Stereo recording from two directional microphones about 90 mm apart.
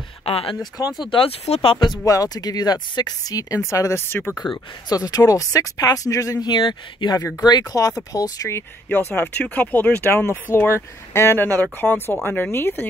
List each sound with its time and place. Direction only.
0.2 s speech: 90° left
0.9 s speech: 65° left (ahead or behind)
2.0 s speech: 45° left (ahead or behind)
4.4 s speech: 5° right (ahead or behind)
4.8 s speech: 45° left (ahead or behind)
6.5 s speech: 55° left (ahead or behind)
7.2 s speech: 30° left (ahead or behind)
7.4 s speech: 45° left (ahead or behind)
8.8 s speech: 25° left (ahead or behind)